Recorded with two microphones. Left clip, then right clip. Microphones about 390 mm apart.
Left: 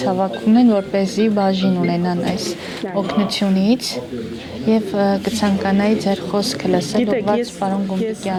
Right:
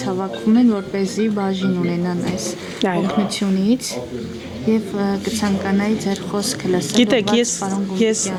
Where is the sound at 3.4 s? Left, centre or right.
Centre.